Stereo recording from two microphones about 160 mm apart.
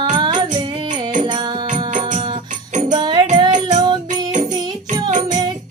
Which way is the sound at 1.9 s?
50° right (ahead or behind).